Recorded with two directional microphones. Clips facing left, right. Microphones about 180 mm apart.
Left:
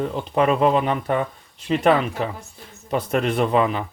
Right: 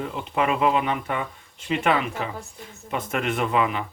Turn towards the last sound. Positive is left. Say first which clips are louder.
# left 4 dB
turn(degrees=35)  # may be behind; listen again after turning